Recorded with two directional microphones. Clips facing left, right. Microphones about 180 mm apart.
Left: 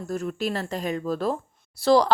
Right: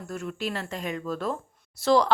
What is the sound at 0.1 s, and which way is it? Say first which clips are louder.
A woman's voice: left 4 dB; 40° left (ahead or behind).